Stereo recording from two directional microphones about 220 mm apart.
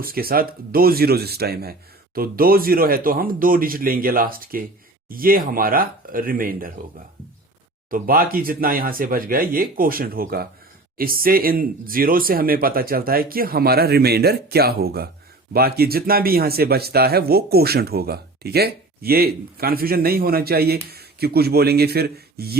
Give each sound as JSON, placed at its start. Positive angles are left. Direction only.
{"t": 0.0, "sound": "speech", "side_deg": -40}
{"t": 7.9, "sound": "speech", "side_deg": -40}